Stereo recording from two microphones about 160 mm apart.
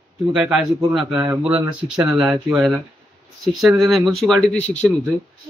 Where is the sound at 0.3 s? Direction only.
5° right (ahead or behind).